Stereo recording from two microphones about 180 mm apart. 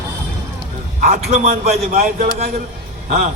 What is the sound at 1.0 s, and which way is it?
A man's voice, 50° right (ahead or behind).